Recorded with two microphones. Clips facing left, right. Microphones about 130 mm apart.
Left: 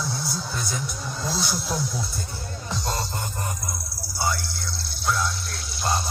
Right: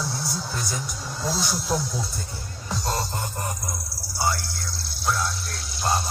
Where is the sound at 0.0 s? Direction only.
5° right (ahead or behind).